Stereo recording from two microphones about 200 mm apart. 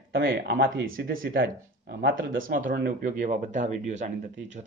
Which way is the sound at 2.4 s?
45° right (ahead or behind).